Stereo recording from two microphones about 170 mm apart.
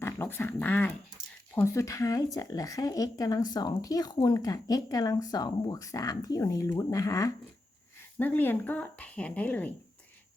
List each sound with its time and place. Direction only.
0.0 s speech: 15° left (ahead or behind)